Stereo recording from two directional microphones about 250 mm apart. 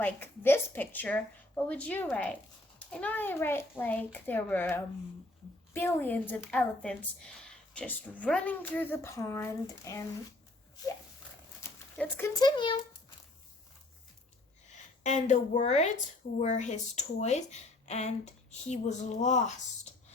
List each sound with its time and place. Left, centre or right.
0.0 s a woman's voice: centre
11.9 s a woman's voice: centre
15.0 s speech: left